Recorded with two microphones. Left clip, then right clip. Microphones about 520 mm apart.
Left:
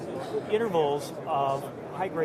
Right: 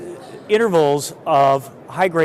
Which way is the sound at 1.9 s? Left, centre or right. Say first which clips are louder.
Right 14 dB; right.